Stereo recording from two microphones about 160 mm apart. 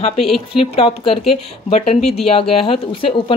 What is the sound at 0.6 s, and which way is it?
Speech, 35° left (ahead or behind).